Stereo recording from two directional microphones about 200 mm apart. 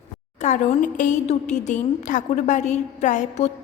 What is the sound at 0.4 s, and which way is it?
A woman's voice, 35° left (ahead or behind).